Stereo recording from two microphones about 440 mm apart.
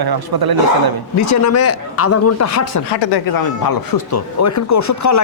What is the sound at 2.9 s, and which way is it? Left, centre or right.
Speech, left.